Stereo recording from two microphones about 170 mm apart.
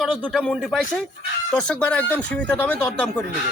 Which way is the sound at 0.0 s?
Centre (ahead or behind).